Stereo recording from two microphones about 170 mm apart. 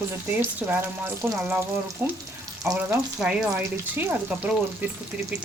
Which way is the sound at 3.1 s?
5° right (ahead or behind).